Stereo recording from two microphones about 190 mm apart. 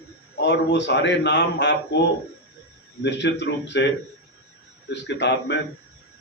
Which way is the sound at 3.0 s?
65° left (ahead or behind).